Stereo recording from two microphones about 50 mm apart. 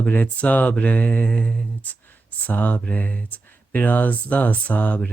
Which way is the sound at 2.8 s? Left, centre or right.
Left.